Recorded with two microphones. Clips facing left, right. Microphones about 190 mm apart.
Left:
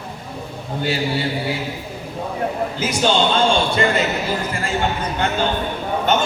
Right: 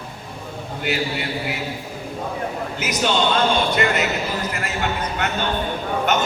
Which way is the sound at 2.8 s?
30° left (ahead or behind).